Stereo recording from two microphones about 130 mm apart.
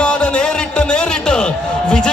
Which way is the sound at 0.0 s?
10° left (ahead or behind).